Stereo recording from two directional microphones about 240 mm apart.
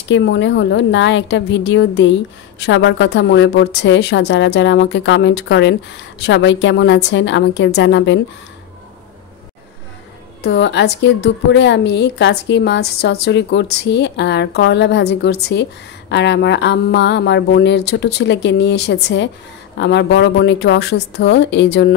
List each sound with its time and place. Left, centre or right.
0.1 s a woman's voice: left
10.4 s a woman's voice: left